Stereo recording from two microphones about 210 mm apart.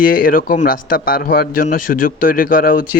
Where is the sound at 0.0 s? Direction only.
40° left (ahead or behind).